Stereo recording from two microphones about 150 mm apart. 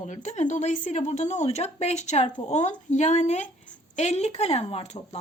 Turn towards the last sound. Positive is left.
turn(degrees=40)  # may be behind; listen again after turning